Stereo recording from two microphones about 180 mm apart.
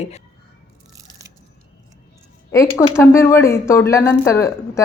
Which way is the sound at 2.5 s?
15° left (ahead or behind).